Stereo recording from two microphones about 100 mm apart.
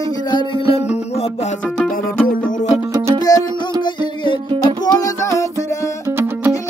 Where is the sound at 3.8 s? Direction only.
50° left (ahead or behind).